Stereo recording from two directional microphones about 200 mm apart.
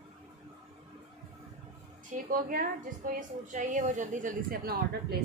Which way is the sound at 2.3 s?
45° right (ahead or behind).